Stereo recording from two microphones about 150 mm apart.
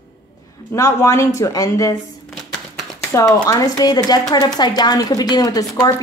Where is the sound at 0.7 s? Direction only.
20° left (ahead or behind).